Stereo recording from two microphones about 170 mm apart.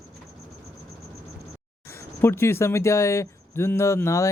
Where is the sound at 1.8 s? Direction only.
15° left (ahead or behind).